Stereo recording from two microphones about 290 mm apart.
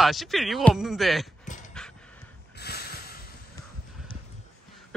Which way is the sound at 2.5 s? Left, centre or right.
Left.